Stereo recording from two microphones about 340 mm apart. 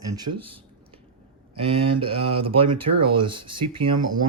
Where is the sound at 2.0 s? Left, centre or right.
Centre.